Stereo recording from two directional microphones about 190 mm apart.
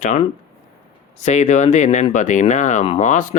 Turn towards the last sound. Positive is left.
turn(degrees=40)  # may be behind; listen again after turning